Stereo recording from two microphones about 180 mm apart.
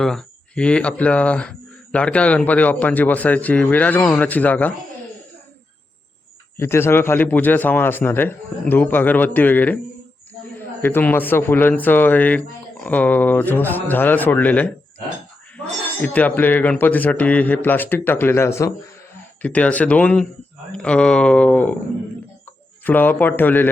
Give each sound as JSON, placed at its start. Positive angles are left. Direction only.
{"t": 0.0, "sound": "speech", "side_deg": 5}
{"t": 6.6, "sound": "speech", "side_deg": 15}
{"t": 10.8, "sound": "speech", "side_deg": 10}
{"t": 22.8, "sound": "speech", "side_deg": 10}